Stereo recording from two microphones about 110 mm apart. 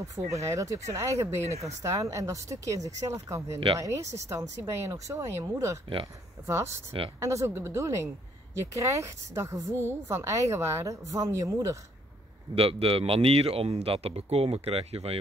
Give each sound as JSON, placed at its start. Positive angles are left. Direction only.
{"t": 0.3, "sound": "a woman's voice", "side_deg": -30}
{"t": 12.5, "sound": "speech", "side_deg": -60}